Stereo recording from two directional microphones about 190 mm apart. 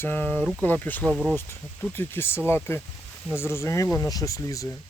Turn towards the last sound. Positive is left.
turn(degrees=15)  # may be behind; listen again after turning